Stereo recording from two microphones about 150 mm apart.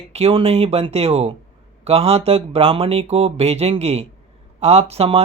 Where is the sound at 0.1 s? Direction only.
40° right (ahead or behind).